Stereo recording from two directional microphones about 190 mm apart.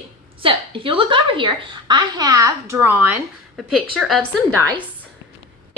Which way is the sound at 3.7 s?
Centre (ahead or behind).